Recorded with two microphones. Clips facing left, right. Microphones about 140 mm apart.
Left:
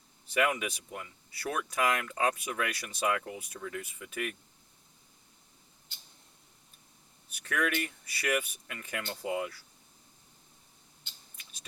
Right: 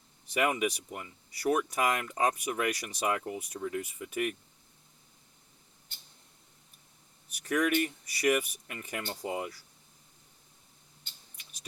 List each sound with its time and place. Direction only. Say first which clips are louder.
0.3 s speech: right 1 dB; 20° right (ahead or behind)
7.4 s speech: right 4 dB; 15° right (ahead or behind)